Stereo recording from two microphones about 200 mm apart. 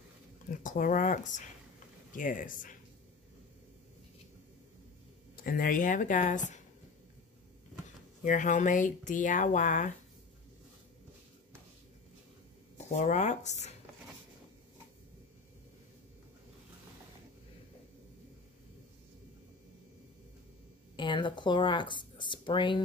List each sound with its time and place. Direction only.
0.5 s speech: 40° left (ahead or behind)
5.3 s speech: 45° left (ahead or behind)
8.2 s speech: 40° left (ahead or behind)
12.7 s speech: 35° left (ahead or behind)
20.9 s speech: 25° left (ahead or behind)